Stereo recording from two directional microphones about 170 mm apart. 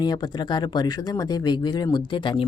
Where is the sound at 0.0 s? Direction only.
25° left (ahead or behind).